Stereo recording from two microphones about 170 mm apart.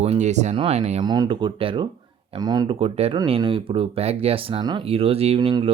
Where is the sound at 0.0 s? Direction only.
40° right (ahead or behind).